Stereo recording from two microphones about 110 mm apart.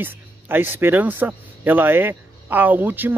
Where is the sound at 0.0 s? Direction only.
20° right (ahead or behind).